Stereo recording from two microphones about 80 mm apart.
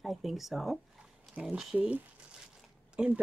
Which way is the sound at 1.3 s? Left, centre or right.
Centre.